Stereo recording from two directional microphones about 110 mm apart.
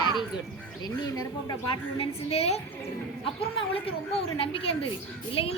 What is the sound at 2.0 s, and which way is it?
Speech, 65° left (ahead or behind).